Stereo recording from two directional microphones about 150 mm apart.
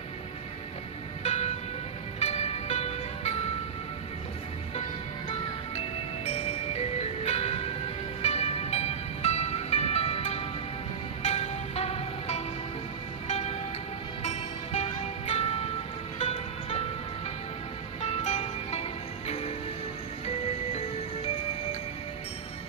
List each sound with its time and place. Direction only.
1.2 s music: 45° left (ahead or behind)
5.3 s music: 45° left (ahead or behind)
18.0 s music: 45° left (ahead or behind)